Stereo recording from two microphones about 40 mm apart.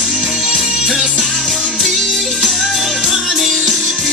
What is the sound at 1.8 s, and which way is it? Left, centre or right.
Music, centre.